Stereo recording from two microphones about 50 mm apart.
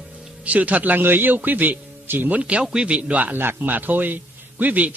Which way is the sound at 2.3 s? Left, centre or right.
Right.